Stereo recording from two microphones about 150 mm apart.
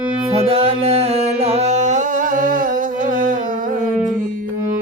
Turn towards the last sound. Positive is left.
turn(degrees=-60)  # may be behind; listen again after turning